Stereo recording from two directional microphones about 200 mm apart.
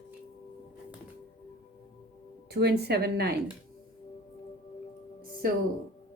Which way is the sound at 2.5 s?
55° right (ahead or behind).